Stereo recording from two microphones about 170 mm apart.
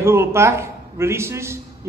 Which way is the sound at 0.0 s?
15° right (ahead or behind).